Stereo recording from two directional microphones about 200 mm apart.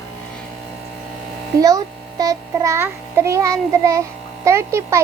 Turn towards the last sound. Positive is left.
turn(degrees=-15)  # may be behind; listen again after turning